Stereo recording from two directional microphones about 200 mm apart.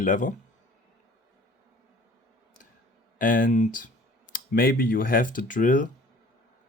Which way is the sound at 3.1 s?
40° left (ahead or behind).